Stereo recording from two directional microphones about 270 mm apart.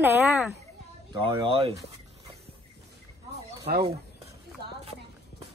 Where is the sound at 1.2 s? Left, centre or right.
Centre.